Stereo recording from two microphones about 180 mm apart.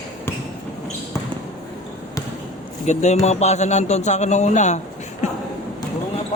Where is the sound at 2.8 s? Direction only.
40° left (ahead or behind).